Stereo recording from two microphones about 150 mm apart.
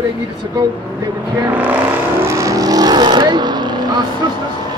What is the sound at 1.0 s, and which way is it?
Speech, 25° right (ahead or behind).